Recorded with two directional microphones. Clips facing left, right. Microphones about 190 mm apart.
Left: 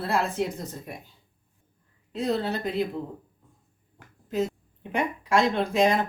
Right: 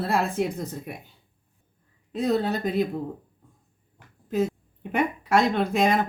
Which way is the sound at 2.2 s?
50° right (ahead or behind).